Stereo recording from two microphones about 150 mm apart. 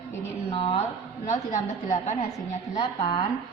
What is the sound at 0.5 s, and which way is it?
Speech, 40° left (ahead or behind).